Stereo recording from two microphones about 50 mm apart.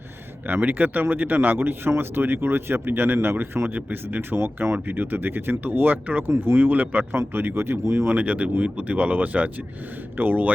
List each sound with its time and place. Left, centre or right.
0.4 s speech: right
3.8 s speech: right
6.3 s speech: right
7.2 s speech: right
8.1 s speech: right